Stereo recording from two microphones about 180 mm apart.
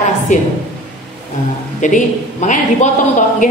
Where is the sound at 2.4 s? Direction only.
40° left (ahead or behind).